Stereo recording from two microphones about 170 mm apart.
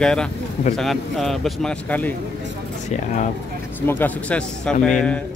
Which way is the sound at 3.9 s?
10° left (ahead or behind).